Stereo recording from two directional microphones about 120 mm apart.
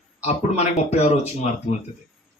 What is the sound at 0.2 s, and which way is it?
Speech, 65° left (ahead or behind).